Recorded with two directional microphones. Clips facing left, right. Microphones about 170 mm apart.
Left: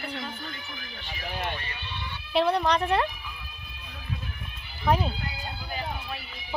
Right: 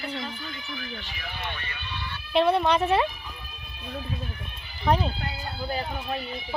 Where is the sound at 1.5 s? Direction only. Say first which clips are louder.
Even; 30° left (ahead or behind).